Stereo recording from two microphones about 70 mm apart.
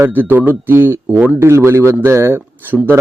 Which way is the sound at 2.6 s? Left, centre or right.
Right.